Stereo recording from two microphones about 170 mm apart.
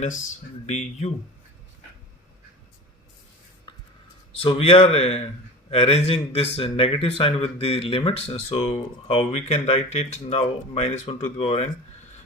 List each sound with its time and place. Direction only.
0.7 s speech: 40° left (ahead or behind)
4.4 s speech: 35° left (ahead or behind)